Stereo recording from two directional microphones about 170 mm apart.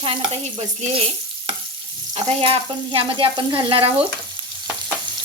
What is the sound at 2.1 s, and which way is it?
Speech, 30° right (ahead or behind).